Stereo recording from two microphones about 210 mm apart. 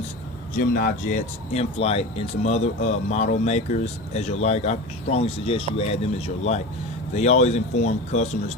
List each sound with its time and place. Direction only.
0.6 s speech: 45° left (ahead or behind)